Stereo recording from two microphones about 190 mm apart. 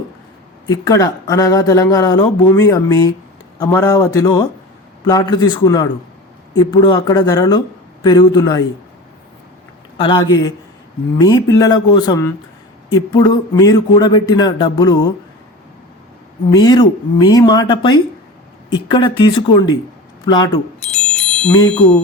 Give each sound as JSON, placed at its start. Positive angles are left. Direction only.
{"t": 0.7, "sound": "speech", "side_deg": 20}
{"t": 10.0, "sound": "speech", "side_deg": 25}
{"t": 16.5, "sound": "speech", "side_deg": 20}
{"t": 20.8, "sound": "wind chime", "side_deg": 5}